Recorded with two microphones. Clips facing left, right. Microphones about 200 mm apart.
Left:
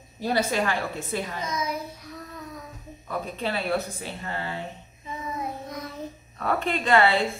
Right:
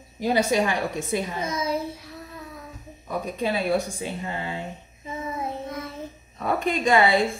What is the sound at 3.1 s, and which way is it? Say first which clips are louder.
A woman's voice: right 3 dB; 15° right (ahead or behind).